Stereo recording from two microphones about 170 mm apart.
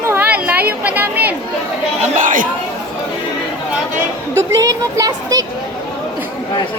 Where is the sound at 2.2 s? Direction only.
50° right (ahead or behind).